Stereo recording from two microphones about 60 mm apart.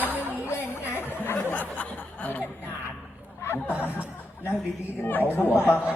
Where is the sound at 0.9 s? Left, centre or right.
Left.